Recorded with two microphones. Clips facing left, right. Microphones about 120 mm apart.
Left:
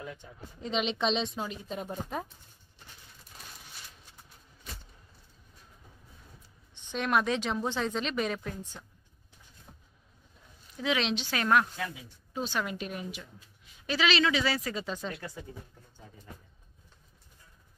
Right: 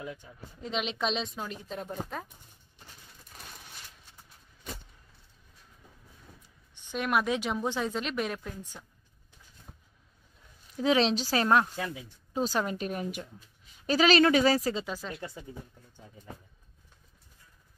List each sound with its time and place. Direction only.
0.1 s speech: 5° right (ahead or behind)
6.7 s a woman's voice: 10° right (ahead or behind)
10.8 s speech: 35° right (ahead or behind)
14.9 s speech: centre (ahead or behind)